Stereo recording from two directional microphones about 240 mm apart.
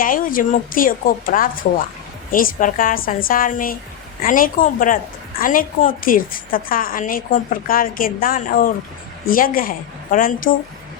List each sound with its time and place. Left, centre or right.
0.0 s a woman's voice: left